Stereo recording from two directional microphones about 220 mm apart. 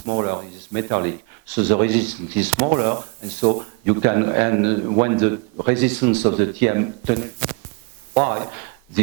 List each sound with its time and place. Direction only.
0.0 s speech: 25° right (ahead or behind)
1.9 s speech: 10° right (ahead or behind)
2.6 s speech: 25° right (ahead or behind)